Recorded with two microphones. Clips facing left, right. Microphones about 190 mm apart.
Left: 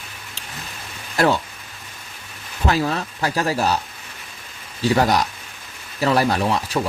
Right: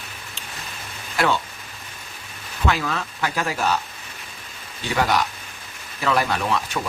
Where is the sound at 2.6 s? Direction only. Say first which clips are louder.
Left 3 dB; 35° left (ahead or behind).